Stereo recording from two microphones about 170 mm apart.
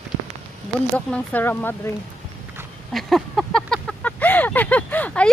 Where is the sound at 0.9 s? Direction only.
10° left (ahead or behind).